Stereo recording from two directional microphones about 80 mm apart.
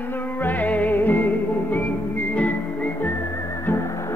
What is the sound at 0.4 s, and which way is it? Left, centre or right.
Music, left.